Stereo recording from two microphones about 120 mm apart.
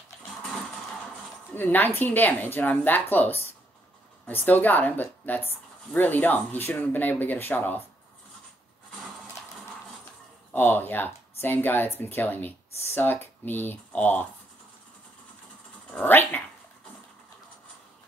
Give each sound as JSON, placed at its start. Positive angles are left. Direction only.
{"t": 0.4, "sound": "a sound", "side_deg": 0}
{"t": 1.5, "sound": "a woman's voice", "side_deg": 15}
{"t": 10.5, "sound": "speech", "side_deg": 15}
{"t": 15.9, "sound": "dog", "side_deg": 15}